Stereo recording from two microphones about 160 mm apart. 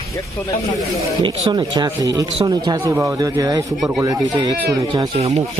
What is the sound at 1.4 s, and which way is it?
Speech, 30° right (ahead or behind).